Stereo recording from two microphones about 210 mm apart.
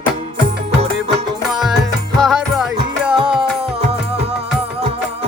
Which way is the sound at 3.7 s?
30° right (ahead or behind).